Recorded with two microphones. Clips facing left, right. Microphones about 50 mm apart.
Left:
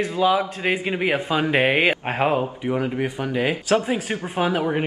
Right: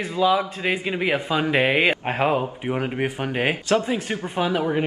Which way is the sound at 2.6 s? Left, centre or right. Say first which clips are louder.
Left 1 dB; right.